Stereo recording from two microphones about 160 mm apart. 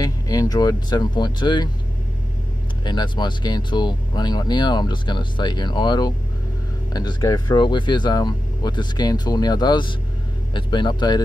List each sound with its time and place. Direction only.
0.0 s speech: 25° left (ahead or behind)
2.8 s speech: 30° left (ahead or behind)